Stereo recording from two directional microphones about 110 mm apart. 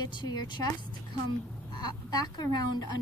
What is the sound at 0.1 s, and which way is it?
Speech, 45° left (ahead or behind).